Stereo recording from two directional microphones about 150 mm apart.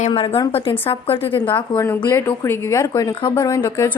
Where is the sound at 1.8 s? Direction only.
15° left (ahead or behind).